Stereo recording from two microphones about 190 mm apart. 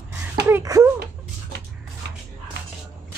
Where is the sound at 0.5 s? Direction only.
15° right (ahead or behind).